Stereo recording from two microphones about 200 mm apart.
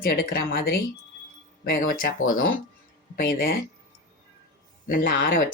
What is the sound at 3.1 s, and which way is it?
Speech, 45° left (ahead or behind).